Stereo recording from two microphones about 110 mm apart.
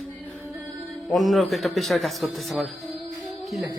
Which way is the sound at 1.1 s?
Centre (ahead or behind).